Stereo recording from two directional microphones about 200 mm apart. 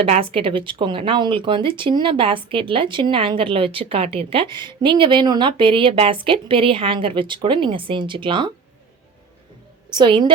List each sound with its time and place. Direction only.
0.0 s speech: 30° right (ahead or behind)
9.9 s speech: 25° right (ahead or behind)